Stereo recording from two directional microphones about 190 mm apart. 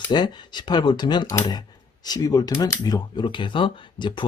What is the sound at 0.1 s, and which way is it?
Speech, 25° left (ahead or behind).